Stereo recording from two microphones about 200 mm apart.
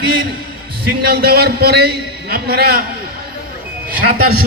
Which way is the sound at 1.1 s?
50° right (ahead or behind).